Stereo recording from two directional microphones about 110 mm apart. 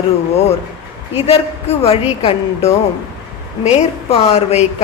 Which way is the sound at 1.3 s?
65° left (ahead or behind).